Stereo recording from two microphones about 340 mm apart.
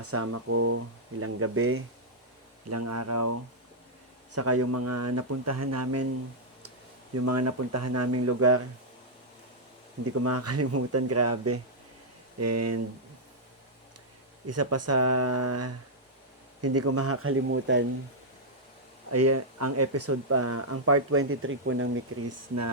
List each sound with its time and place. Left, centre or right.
0.0 s speech: right
7.1 s speech: right
10.2 s speech: right
14.4 s speech: right
19.1 s speech: right
22.3 s speech: right